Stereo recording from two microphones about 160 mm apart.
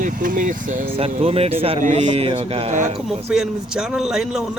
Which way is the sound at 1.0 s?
40° right (ahead or behind).